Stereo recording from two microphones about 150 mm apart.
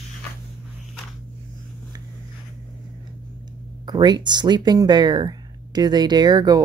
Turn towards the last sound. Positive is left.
turn(degrees=-25)  # may be behind; listen again after turning